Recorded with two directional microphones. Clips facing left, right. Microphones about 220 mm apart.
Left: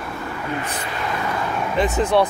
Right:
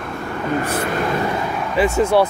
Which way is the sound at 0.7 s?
50° right (ahead or behind).